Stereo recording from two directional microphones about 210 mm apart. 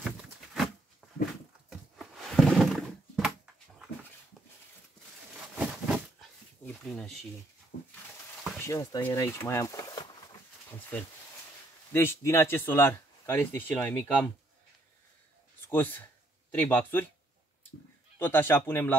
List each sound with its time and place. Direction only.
0.0 s a sound: centre (ahead or behind)
1.0 s dog: 5° right (ahead or behind)
1.7 s a sound: centre (ahead or behind)
5.6 s a sound: 5° right (ahead or behind)
6.6 s speech: 5° left (ahead or behind)
8.5 s speech: 15° left (ahead or behind)
11.9 s speech: 10° left (ahead or behind)
15.7 s speech: 10° left (ahead or behind)
18.2 s speech: 10° left (ahead or behind)